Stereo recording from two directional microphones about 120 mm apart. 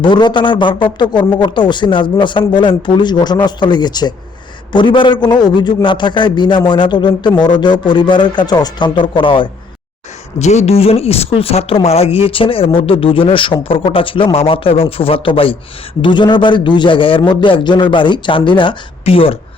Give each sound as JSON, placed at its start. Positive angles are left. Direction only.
{"t": 0.0, "sound": "a man's voice", "side_deg": 40}
{"t": 10.3, "sound": "a man's voice", "side_deg": 70}